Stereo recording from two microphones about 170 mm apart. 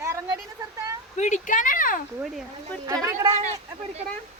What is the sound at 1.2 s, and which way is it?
Speech, 45° left (ahead or behind).